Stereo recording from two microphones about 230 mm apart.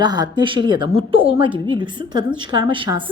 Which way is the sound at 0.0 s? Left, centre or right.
Centre.